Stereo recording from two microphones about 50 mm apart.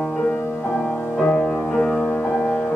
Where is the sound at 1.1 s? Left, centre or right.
Centre.